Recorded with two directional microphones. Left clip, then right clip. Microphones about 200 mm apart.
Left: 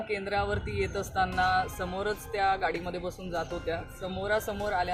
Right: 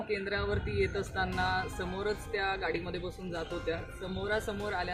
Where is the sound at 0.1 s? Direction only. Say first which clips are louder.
Left 3 dB; centre (ahead or behind).